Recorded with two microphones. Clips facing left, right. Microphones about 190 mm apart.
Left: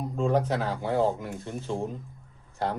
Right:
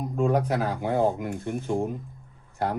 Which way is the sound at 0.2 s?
10° right (ahead or behind).